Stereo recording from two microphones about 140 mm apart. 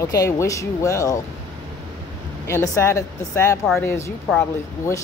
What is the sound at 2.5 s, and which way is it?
Speech, 20° left (ahead or behind).